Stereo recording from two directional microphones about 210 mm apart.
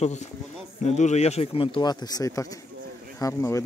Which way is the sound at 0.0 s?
35° left (ahead or behind).